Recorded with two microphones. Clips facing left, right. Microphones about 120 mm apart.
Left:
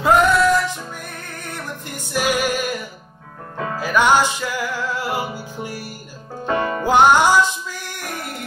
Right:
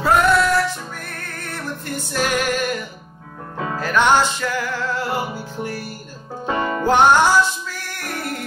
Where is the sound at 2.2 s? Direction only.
10° left (ahead or behind).